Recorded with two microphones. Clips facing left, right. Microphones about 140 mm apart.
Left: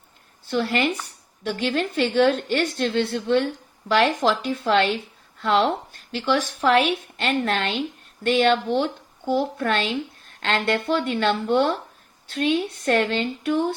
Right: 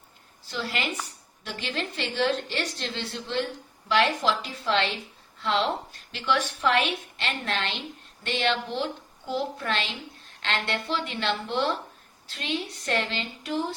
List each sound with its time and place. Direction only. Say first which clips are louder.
0.4 s a woman's voice: left 9 dB; 55° left (ahead or behind)
3.8 s a woman's voice: left 4 dB; 45° left (ahead or behind)
6.1 s a woman's voice: left 4 dB; 40° left (ahead or behind)